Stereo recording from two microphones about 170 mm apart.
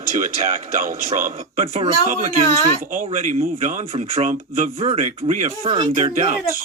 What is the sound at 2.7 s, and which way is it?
A man's voice, 50° right (ahead or behind).